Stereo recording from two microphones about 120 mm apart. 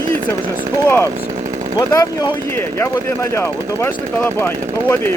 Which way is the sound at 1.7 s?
30° left (ahead or behind).